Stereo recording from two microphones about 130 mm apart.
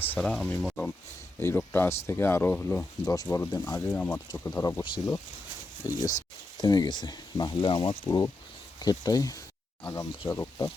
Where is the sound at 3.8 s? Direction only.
10° left (ahead or behind).